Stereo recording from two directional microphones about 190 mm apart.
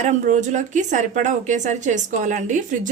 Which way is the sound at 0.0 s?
40° right (ahead or behind).